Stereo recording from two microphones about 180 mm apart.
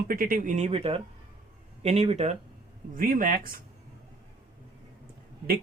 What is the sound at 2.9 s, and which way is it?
Speech, 50° right (ahead or behind).